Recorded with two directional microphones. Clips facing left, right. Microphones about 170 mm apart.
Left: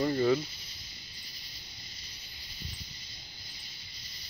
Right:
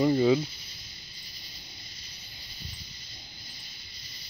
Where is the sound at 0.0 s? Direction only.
15° right (ahead or behind).